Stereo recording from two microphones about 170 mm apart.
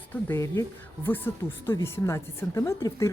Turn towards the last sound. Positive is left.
turn(degrees=15)  # may be behind; listen again after turning